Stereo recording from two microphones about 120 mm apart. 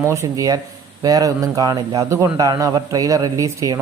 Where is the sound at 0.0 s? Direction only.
25° right (ahead or behind).